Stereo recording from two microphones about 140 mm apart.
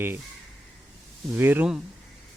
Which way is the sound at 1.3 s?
15° right (ahead or behind).